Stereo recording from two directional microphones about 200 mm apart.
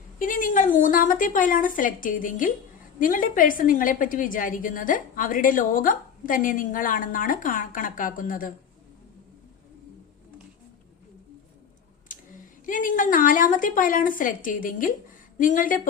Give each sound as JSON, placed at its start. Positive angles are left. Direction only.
{"t": 0.2, "sound": "a woman's voice", "side_deg": 40}
{"t": 12.6, "sound": "a woman's voice", "side_deg": 40}